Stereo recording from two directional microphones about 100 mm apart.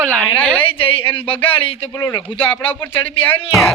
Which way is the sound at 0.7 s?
65° left (ahead or behind).